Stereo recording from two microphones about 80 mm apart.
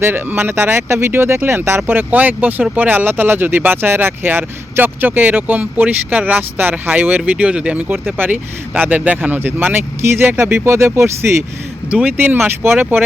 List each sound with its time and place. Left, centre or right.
0.0 s speech: right
11.9 s speech: centre